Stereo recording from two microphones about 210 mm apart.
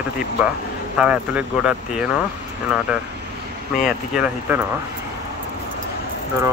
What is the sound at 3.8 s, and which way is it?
Speech, 5° right (ahead or behind).